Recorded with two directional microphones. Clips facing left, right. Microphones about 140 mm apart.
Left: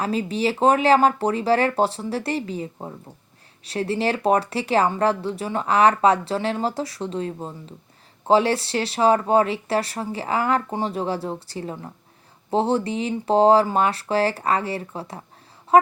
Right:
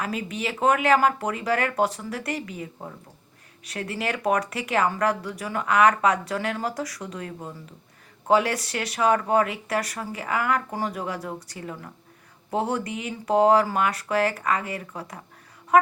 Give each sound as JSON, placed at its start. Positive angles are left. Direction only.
{"t": 0.0, "sound": "speech", "side_deg": 30}